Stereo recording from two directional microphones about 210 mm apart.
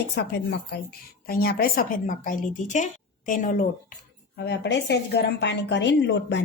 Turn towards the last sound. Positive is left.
turn(degrees=55)  # may be behind; listen again after turning